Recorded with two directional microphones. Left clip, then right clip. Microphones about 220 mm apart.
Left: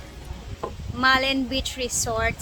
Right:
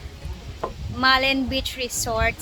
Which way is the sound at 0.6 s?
15° left (ahead or behind).